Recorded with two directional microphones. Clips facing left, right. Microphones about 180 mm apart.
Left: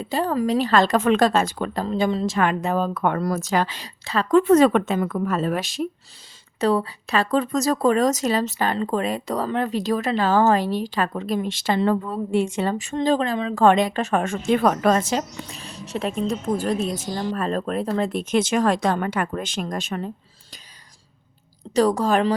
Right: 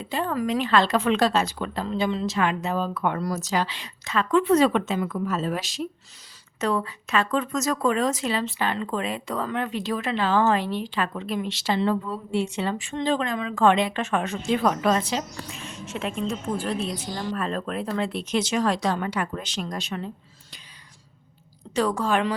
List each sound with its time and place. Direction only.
0.0 s speech: 40° left (ahead or behind)
4.0 s speech: 35° left (ahead or behind); by 5.9 s 55° left (ahead or behind)
6.6 s speech: 35° left (ahead or behind)
21.8 s speech: 40° left (ahead or behind)